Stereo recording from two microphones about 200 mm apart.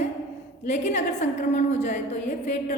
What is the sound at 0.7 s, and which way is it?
A woman's voice, 35° left (ahead or behind).